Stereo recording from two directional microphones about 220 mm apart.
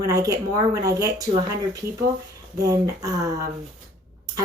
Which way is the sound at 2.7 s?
15° right (ahead or behind).